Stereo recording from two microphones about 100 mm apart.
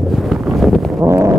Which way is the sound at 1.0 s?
30° right (ahead or behind).